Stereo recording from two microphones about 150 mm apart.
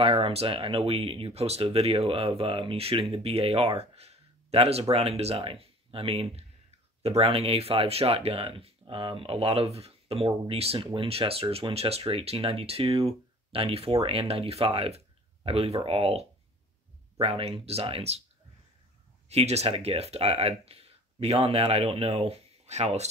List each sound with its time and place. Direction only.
0.0 s speech: 35° right (ahead or behind)
19.2 s speech: 45° right (ahead or behind)